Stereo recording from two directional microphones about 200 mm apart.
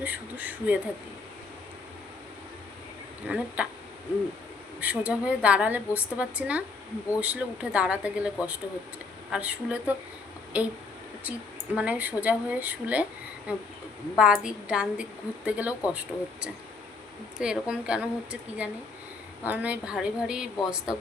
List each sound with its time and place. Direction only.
0.0 s speech: 10° right (ahead or behind)
3.2 s speech: 5° right (ahead or behind)
4.8 s a woman's voice: 5° right (ahead or behind)